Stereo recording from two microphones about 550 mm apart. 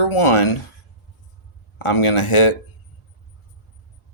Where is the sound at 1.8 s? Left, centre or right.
Left.